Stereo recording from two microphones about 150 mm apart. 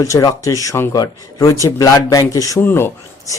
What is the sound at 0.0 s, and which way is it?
Speech, 25° left (ahead or behind).